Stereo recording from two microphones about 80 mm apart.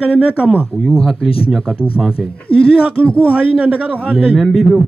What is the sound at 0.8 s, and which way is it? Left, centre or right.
A man's voice, centre.